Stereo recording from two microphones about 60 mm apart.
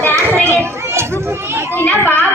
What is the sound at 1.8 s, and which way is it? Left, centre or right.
Chatter, left.